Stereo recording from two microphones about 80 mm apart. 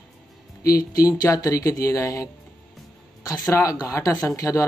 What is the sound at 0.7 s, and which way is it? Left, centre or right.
Speech, left.